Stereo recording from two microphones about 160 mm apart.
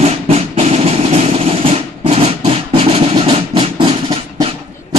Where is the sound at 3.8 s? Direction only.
30° right (ahead or behind).